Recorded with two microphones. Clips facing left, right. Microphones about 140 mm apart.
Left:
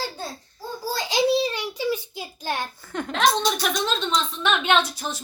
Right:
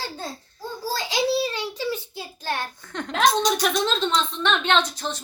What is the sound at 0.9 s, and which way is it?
Child singing, 20° left (ahead or behind).